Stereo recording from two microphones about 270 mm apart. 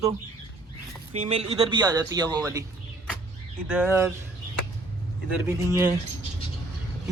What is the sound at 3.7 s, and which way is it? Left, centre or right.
Speech, centre.